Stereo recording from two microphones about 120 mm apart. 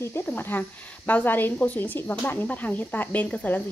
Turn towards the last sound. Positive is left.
turn(degrees=15)  # may be behind; listen again after turning